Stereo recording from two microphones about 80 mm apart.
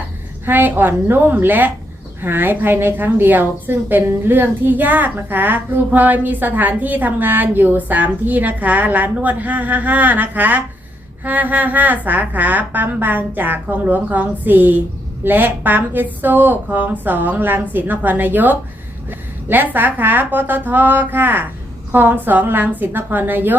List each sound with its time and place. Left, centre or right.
0.4 s a woman's voice: right